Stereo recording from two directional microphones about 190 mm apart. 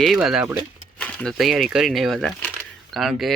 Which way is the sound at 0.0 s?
Centre (ahead or behind).